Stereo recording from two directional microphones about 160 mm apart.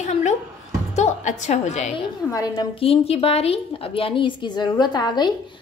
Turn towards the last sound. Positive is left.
turn(degrees=25)  # may be behind; listen again after turning